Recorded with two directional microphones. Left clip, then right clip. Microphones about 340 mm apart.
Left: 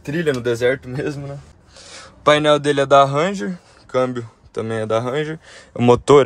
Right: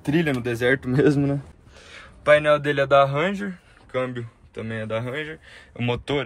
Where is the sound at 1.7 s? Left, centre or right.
Centre.